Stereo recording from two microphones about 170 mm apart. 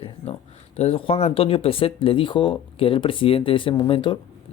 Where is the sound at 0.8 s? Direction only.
35° left (ahead or behind).